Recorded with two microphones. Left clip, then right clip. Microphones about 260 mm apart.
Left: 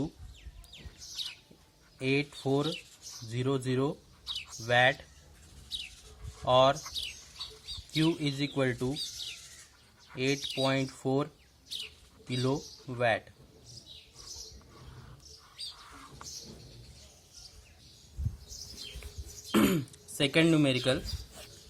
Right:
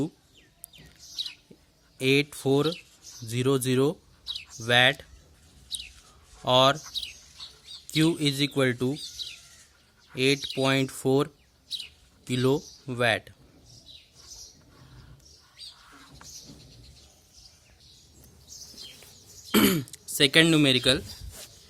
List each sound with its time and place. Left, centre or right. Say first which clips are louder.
2.0 s speech: right 7 dB; right
5.7 s a sound: right 2 dB; centre
6.4 s speech: right 3 dB; right
7.0 s bird: right 3 dB; centre
7.9 s speech: right 6 dB; right
10.2 s speech: right 6 dB; right
12.3 s speech: right 7 dB; right
19.5 s throat clearing: right 4 dB; right